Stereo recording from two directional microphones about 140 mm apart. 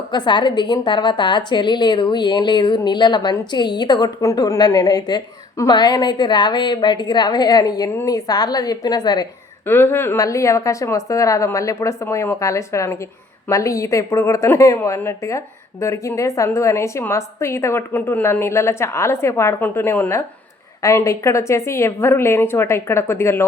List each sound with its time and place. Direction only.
0.1 s a woman's voice: 35° left (ahead or behind)
9.6 s a woman's voice: 15° left (ahead or behind)